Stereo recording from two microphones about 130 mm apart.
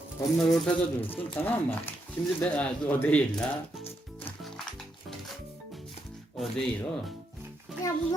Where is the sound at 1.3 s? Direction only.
15° left (ahead or behind).